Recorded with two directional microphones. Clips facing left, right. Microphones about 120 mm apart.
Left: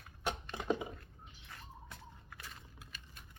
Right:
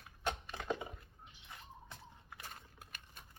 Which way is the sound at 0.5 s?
15° left (ahead or behind).